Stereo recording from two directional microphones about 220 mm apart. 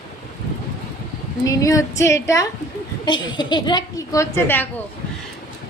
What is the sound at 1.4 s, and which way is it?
A woman's voice, 15° left (ahead or behind).